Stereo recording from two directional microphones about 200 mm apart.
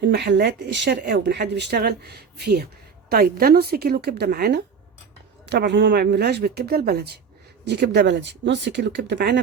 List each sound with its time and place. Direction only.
0.0 s speech: 60° right (ahead or behind)